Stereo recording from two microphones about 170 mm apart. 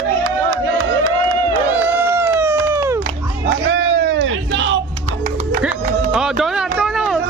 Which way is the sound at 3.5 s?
90° right.